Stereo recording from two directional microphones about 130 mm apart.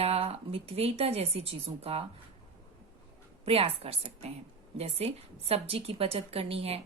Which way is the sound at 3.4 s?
50° right (ahead or behind).